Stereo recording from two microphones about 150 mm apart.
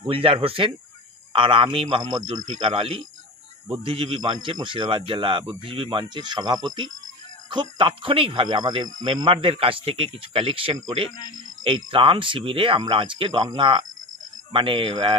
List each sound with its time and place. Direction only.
0.0 s speech: 35° right (ahead or behind)